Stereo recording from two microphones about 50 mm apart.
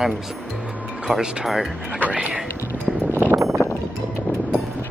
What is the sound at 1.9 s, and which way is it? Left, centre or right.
Speech, right.